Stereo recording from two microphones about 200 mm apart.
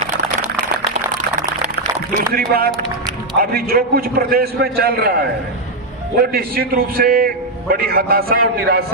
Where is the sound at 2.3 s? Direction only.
50° right (ahead or behind).